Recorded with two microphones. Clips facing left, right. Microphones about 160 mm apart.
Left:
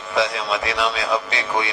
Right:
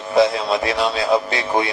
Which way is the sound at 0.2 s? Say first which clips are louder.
Right 6 dB; 30° right (ahead or behind).